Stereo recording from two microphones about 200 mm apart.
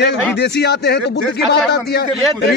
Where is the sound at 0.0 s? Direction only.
55° left (ahead or behind).